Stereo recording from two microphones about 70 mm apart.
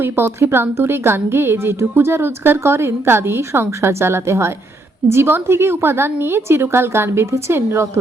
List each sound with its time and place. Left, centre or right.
0.0 s a woman's voice: right